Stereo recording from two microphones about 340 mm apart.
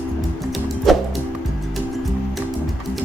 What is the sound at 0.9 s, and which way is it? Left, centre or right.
Music, centre.